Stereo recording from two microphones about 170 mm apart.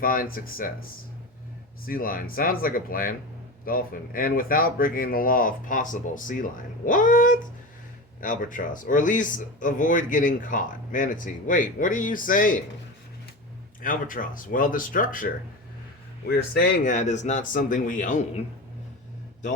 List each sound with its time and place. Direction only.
0.0 s speech: 55° left (ahead or behind)
1.9 s speech: 55° left (ahead or behind)
13.8 s speech: 50° left (ahead or behind)
16.3 s speech: 60° left (ahead or behind)